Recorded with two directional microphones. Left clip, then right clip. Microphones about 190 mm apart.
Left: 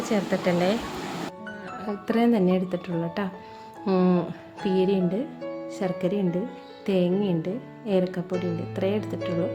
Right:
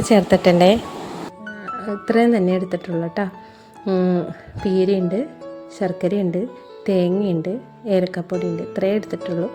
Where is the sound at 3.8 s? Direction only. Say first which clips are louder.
Right 4 dB; 15° right (ahead or behind).